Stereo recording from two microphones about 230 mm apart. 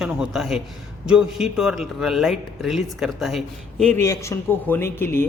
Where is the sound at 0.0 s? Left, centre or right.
Centre.